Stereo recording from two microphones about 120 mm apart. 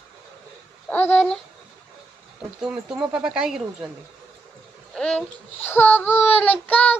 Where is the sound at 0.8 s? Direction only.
10° left (ahead or behind).